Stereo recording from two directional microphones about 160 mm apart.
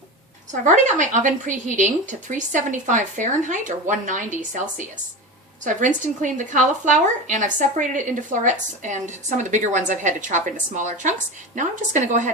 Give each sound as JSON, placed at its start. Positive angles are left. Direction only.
{"t": 0.6, "sound": "speech", "side_deg": -50}